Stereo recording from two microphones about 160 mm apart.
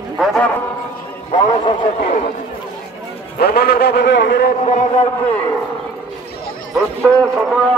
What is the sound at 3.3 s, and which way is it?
A man's voice, 75° left (ahead or behind).